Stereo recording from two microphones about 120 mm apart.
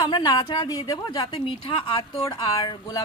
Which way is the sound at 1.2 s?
45° left (ahead or behind).